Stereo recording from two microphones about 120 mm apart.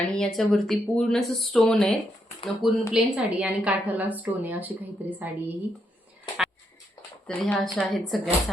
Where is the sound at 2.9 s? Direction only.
5° right (ahead or behind).